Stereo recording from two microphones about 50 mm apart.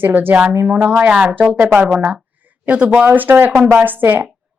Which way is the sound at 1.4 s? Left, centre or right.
Right.